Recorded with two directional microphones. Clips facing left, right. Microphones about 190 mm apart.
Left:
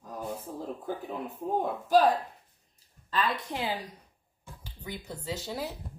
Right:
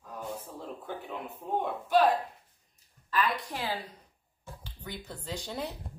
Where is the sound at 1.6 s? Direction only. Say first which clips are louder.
Left 2 dB; 40° left (ahead or behind).